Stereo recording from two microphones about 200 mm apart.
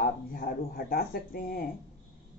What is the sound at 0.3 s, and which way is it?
Speech, 45° left (ahead or behind).